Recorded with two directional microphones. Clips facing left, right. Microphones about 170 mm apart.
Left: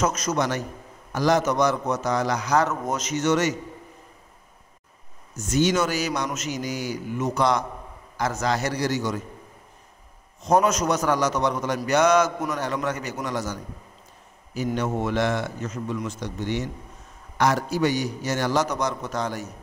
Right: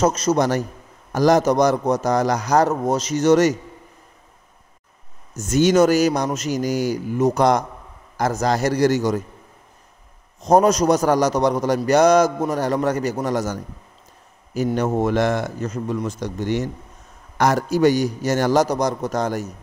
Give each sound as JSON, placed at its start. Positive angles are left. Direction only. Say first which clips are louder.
{"t": 0.0, "sound": "a man's voice", "louder": "right 6 dB", "side_deg": -30}
{"t": 5.3, "sound": "a man's voice", "louder": "right 5 dB", "side_deg": -45}
{"t": 10.4, "sound": "a man's voice", "louder": "right 5 dB", "side_deg": -35}